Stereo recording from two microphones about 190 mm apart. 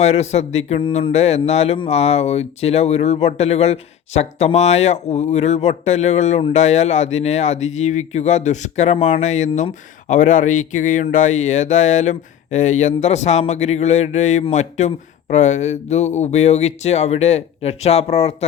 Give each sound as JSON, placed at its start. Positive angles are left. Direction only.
{"t": 0.0, "sound": "a man's voice", "side_deg": 35}